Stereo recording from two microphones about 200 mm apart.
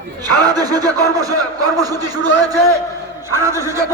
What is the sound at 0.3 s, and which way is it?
Speech, 20° right (ahead or behind).